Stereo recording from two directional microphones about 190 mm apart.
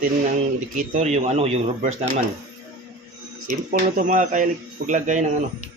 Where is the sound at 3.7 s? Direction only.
45° right (ahead or behind).